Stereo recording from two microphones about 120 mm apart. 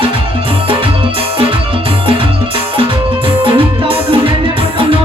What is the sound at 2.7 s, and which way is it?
Music, 45° right (ahead or behind).